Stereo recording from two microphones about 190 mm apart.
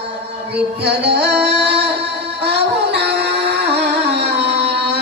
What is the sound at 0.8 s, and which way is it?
Music, 60° right (ahead or behind).